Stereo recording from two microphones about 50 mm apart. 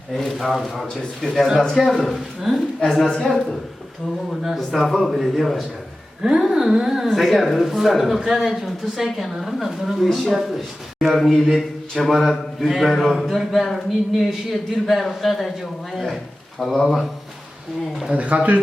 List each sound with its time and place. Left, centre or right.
0.3 s speech: centre
1.2 s a woman's voice: centre
1.7 s speech: centre
2.9 s a woman's voice: centre
4.3 s speech: centre
18.1 s speech: right